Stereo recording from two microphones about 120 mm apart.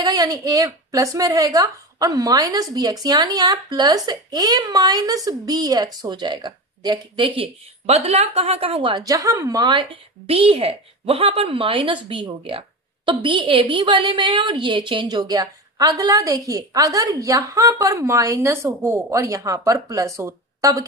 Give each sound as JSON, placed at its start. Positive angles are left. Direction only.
{"t": 0.0, "sound": "a woman's voice", "side_deg": -30}
{"t": 7.8, "sound": "a woman's voice", "side_deg": -60}
{"t": 9.0, "sound": "a woman's voice", "side_deg": -30}